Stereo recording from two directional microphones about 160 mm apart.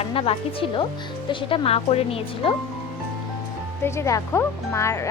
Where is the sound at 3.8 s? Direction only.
15° left (ahead or behind).